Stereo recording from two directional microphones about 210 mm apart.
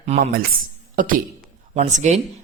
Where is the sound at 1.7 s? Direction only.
35° right (ahead or behind).